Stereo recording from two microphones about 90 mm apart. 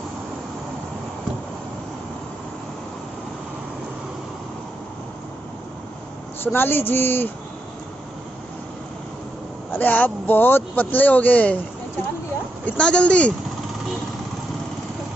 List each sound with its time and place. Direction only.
6.4 s speech: 25° left (ahead or behind)
9.7 s speech: 20° left (ahead or behind)
12.6 s a man's voice: 10° left (ahead or behind)